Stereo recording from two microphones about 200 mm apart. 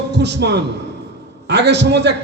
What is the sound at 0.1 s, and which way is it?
A man's voice, 60° right (ahead or behind).